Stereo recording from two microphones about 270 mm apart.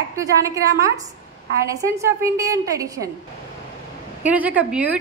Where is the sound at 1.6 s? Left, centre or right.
Centre.